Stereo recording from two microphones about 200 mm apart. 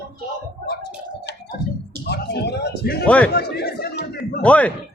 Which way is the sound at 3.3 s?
55° left (ahead or behind).